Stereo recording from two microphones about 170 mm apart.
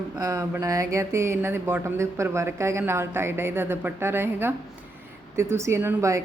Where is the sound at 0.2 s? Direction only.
20° right (ahead or behind).